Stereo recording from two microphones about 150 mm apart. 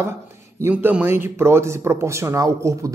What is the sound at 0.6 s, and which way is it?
Speech, 15° right (ahead or behind).